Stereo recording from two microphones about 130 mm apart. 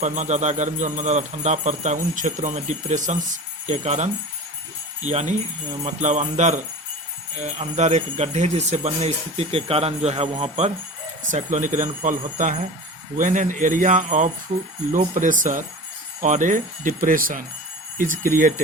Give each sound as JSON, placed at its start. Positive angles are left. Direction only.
{"t": 0.0, "sound": "speech", "side_deg": -70}
{"t": 11.3, "sound": "speech", "side_deg": -70}
{"t": 14.9, "sound": "speech", "side_deg": -85}
{"t": 16.2, "sound": "speech", "side_deg": -75}